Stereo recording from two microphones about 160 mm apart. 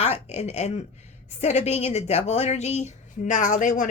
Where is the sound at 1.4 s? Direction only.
45° left (ahead or behind).